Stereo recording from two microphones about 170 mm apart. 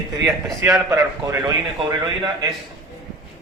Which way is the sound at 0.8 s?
20° right (ahead or behind).